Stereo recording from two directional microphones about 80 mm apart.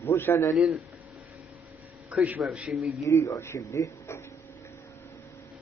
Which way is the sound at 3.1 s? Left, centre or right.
Left.